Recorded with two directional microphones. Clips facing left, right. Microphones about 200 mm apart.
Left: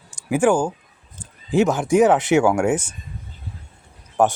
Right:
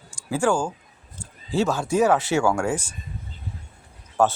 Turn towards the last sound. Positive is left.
turn(degrees=15)  # may be behind; listen again after turning